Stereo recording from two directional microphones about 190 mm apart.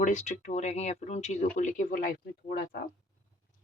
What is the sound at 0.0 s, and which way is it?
Speech, 40° left (ahead or behind).